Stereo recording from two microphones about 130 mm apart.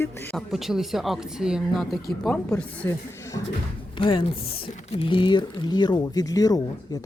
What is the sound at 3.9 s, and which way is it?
A woman's voice, 40° left (ahead or behind).